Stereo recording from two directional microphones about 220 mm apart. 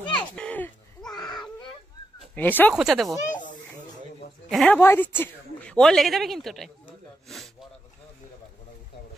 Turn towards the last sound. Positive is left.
turn(degrees=0)  # may be behind; listen again after turning